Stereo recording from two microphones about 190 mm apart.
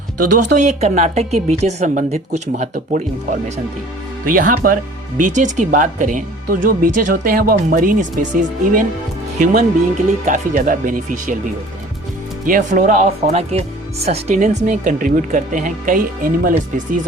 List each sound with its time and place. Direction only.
0.3 s speech: 45° right (ahead or behind)
4.3 s speech: 45° right (ahead or behind)
12.5 s speech: 45° right (ahead or behind)